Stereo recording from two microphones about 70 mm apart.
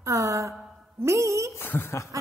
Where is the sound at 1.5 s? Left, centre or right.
Left.